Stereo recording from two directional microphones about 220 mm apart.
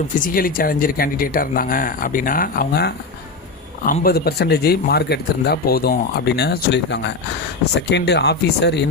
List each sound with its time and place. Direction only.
0.2 s speech: 40° left (ahead or behind)